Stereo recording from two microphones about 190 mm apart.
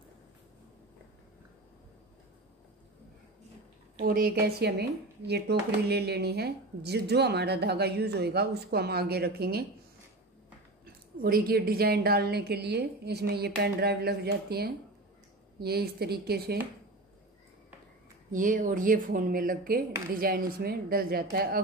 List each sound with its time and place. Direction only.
4.0 s speech: 55° right (ahead or behind)
11.1 s speech: 50° right (ahead or behind)
18.3 s speech: 45° right (ahead or behind)